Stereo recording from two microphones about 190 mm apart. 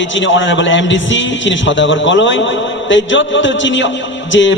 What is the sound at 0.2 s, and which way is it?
A man's voice, 80° left.